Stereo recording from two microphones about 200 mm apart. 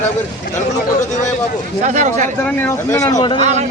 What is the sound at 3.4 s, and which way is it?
Speech, 35° right (ahead or behind).